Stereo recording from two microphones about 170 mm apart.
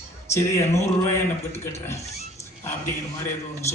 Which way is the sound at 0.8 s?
15° left (ahead or behind).